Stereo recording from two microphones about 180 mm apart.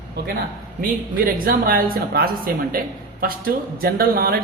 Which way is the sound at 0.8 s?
55° right (ahead or behind).